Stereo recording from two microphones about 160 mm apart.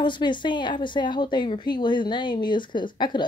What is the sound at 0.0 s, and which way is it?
Speech, 30° left (ahead or behind).